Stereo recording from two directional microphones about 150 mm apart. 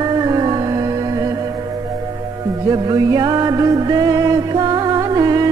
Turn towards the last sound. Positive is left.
turn(degrees=-25)  # may be behind; listen again after turning